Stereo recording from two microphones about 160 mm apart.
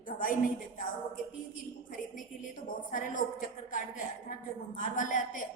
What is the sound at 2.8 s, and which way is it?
A woman's voice, 55° left (ahead or behind).